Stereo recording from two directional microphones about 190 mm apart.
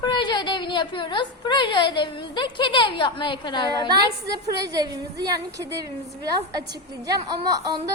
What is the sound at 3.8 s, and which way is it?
A woman's voice, 20° right (ahead or behind).